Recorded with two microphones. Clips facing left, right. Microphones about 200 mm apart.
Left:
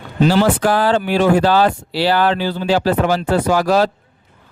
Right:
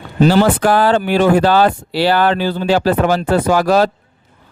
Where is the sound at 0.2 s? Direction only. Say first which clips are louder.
Right 2 dB; 50° right (ahead or behind).